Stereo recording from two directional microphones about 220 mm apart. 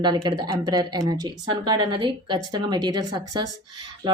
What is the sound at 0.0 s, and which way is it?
A woman's voice, 20° right (ahead or behind).